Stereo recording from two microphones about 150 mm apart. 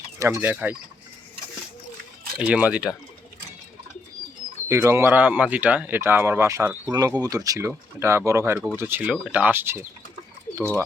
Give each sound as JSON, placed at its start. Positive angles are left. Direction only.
{"t": 0.2, "sound": "speech", "side_deg": -20}
{"t": 2.4, "sound": "speech", "side_deg": -10}
{"t": 4.7, "sound": "speech", "side_deg": -20}